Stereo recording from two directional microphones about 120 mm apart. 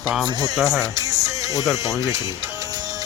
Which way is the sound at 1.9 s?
25° right (ahead or behind).